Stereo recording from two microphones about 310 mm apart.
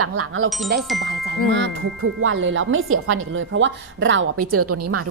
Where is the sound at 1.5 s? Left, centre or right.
Right.